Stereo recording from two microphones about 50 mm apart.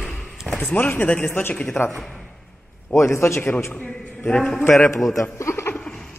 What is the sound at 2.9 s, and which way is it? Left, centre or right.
Speech, left.